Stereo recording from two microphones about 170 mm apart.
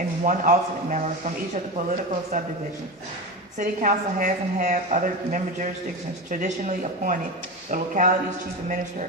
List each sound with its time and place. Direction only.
0.3 s a woman's voice: 50° right (ahead or behind)
3.6 s a woman's voice: 50° right (ahead or behind)